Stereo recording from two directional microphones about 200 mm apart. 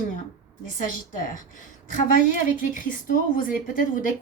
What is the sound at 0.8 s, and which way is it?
A woman's voice, 40° left (ahead or behind).